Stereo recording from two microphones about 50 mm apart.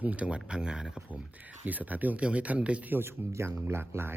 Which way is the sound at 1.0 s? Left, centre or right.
Right.